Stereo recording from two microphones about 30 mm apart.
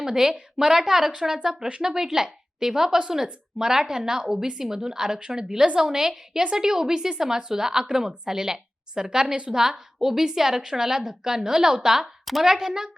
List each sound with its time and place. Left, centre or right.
0.0 s a woman's voice: centre